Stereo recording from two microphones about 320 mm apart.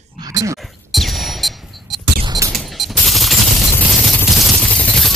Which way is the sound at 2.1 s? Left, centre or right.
Centre.